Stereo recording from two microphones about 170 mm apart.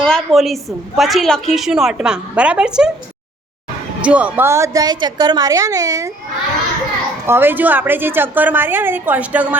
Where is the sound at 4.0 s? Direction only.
5° right (ahead or behind).